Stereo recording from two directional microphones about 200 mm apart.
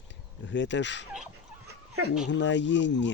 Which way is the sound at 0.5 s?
65° left (ahead or behind).